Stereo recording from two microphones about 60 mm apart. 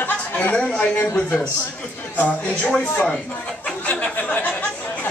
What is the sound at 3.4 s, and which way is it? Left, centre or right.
Chatter, centre.